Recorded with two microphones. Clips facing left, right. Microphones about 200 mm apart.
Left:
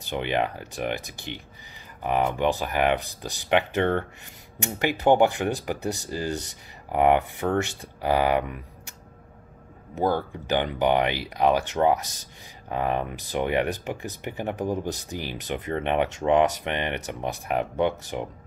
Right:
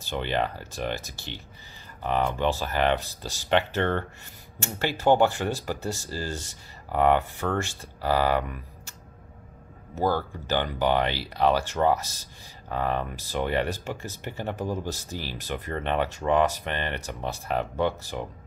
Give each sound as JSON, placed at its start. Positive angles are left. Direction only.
{"t": 0.0, "sound": "speech", "side_deg": 15}
{"t": 9.9, "sound": "speech", "side_deg": 20}